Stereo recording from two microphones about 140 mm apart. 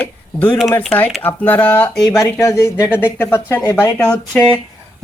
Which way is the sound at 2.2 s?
20° left (ahead or behind).